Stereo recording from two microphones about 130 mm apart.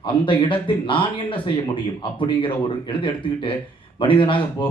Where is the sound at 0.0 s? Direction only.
40° left (ahead or behind).